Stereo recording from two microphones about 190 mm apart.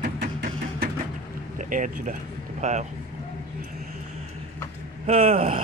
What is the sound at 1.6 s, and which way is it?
Speech, 45° right (ahead or behind).